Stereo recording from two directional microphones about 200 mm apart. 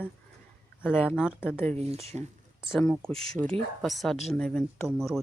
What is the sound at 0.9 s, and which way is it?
Speech, 10° left (ahead or behind).